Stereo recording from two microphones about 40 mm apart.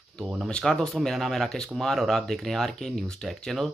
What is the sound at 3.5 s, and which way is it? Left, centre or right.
Speech, centre.